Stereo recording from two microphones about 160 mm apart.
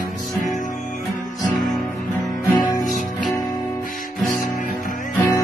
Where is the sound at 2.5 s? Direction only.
25° left (ahead or behind).